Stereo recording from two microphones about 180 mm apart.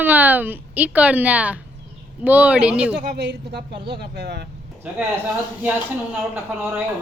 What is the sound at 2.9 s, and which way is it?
Speech, 60° right (ahead or behind).